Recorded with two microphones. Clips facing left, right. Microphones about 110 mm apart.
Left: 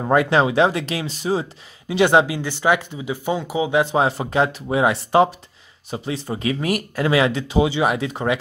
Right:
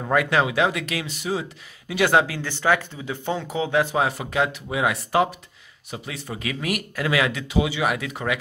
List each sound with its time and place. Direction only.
0.0 s speech: 30° left (ahead or behind)